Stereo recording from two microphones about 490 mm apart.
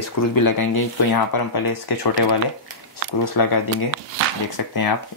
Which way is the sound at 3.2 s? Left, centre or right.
Left.